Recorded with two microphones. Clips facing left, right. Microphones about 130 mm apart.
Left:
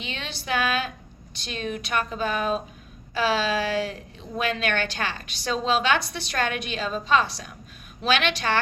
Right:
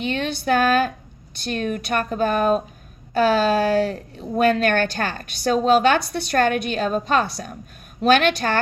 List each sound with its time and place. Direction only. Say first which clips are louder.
0.0 s a woman's voice: right 11 dB; 50° right (ahead or behind)